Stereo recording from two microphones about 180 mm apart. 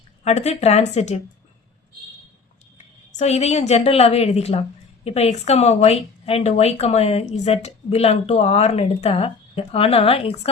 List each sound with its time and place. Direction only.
0.3 s speech: 35° left (ahead or behind)
3.2 s speech: 40° left (ahead or behind)